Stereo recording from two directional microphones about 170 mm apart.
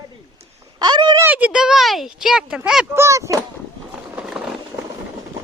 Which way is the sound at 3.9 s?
5° right (ahead or behind).